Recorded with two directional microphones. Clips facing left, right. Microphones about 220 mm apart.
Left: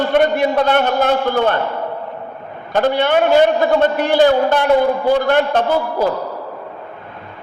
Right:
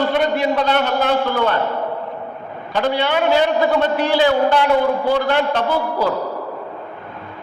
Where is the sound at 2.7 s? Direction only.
50° left (ahead or behind).